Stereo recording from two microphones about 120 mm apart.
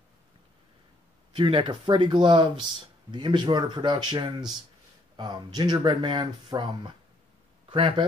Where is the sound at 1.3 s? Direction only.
45° right (ahead or behind).